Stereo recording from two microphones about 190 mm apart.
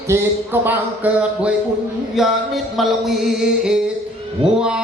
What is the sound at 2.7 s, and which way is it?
Music, centre (ahead or behind).